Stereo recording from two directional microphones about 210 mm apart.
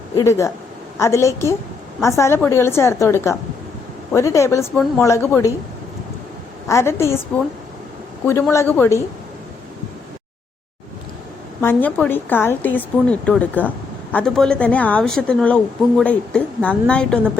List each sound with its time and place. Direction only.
0.2 s speech: 15° left (ahead or behind)
6.7 s speech: 10° left (ahead or behind)
8.3 s speech: 10° left (ahead or behind)
11.6 s a woman's voice: 10° left (ahead or behind)